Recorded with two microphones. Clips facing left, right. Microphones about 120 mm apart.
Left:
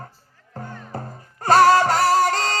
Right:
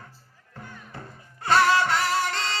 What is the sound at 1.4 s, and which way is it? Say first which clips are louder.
Music: left 6 dB; 40° left (ahead or behind).